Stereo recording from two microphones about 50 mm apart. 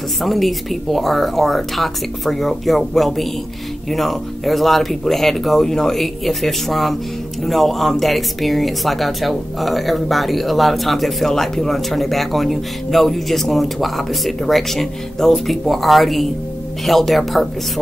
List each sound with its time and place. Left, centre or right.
0.2 s speech: centre